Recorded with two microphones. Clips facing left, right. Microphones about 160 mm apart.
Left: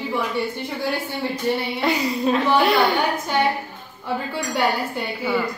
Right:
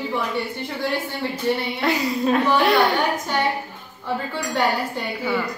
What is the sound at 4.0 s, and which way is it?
Speech, 10° left (ahead or behind).